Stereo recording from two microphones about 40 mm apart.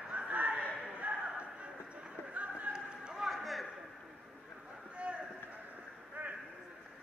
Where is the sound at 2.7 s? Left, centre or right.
Right.